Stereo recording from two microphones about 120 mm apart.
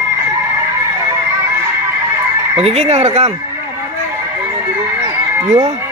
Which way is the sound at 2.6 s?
60° right (ahead or behind).